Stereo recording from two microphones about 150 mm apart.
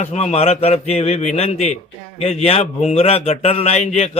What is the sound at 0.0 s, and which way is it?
A man's voice, 50° left (ahead or behind).